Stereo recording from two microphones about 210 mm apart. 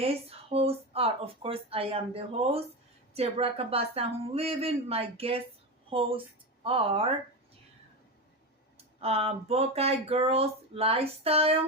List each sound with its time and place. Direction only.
0.0 s speech: 30° right (ahead or behind)
8.8 s speech: 30° right (ahead or behind)